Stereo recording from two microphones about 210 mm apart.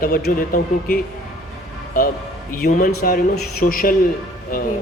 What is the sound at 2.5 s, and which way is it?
A man's voice, 45° left (ahead or behind).